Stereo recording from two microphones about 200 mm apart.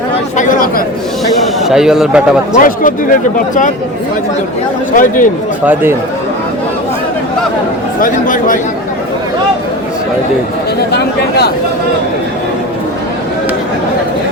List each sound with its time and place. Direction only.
0.3 s chatter: 40° left (ahead or behind)
1.4 s a man's voice: centre (ahead or behind)
2.6 s speech: 45° left (ahead or behind)
4.9 s speech: 40° left (ahead or behind)
8.0 s speech: 40° left (ahead or behind)
10.9 s speech: 55° left (ahead or behind)